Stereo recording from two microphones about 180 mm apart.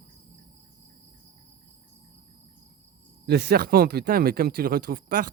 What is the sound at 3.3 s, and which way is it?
Speech, 65° right (ahead or behind).